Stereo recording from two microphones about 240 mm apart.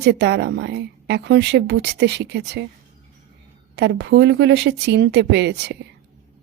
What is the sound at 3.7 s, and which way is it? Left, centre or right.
Speech, right.